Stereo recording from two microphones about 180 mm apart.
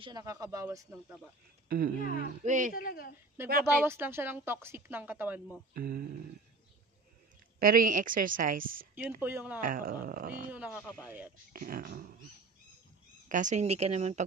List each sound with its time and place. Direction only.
0.0 s speech: 20° right (ahead or behind)
1.7 s a woman's voice: 55° right (ahead or behind)
2.7 s speech: 55° left (ahead or behind)
3.6 s a woman's voice: 10° right (ahead or behind)
7.5 s a woman's voice: 50° right (ahead or behind)
8.9 s a woman's voice: 10° right (ahead or behind)
9.6 s a woman's voice: 50° right (ahead or behind)
10.5 s a woman's voice: 10° right (ahead or behind)
11.5 s a woman's voice: 50° right (ahead or behind)
13.3 s speech: 45° right (ahead or behind)